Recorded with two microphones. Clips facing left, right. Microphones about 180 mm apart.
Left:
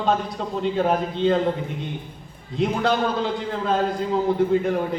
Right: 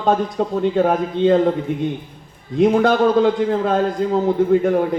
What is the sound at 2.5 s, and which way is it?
A man's voice, 50° right (ahead or behind).